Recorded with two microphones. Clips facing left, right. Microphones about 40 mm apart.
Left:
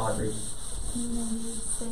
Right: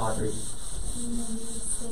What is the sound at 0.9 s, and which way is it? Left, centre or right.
Music, centre.